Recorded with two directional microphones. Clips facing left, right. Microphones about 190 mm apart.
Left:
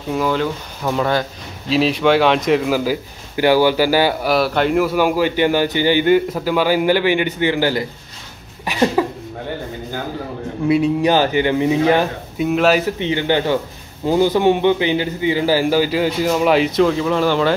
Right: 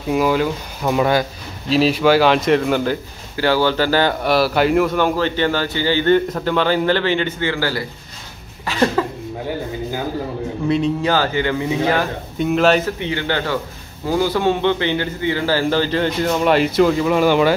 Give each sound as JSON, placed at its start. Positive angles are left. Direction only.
{"t": 0.1, "sound": "speech", "side_deg": -10}
{"t": 1.7, "sound": "a man's voice", "side_deg": 0}
{"t": 8.6, "sound": "a sound", "side_deg": 15}
{"t": 10.7, "sound": "a man's voice", "side_deg": 10}
{"t": 12.4, "sound": "speech", "side_deg": 5}
{"t": 12.8, "sound": "a man's voice", "side_deg": 15}